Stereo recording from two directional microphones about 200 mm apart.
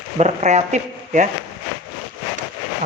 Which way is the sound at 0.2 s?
35° right (ahead or behind).